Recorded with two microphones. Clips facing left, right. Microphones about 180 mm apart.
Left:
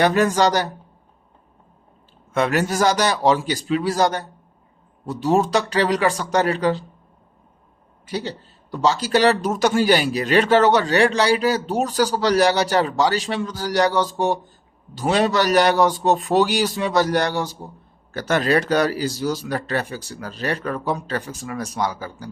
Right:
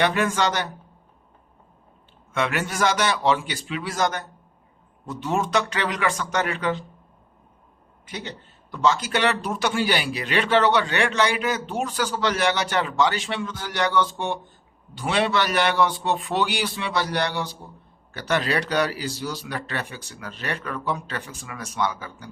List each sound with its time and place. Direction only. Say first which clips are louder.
0.0 s speech: left 5 dB; 40° left (ahead or behind)
2.3 s speech: left 6 dB; 40° left (ahead or behind)
8.0 s speech: left 8 dB; 35° left (ahead or behind)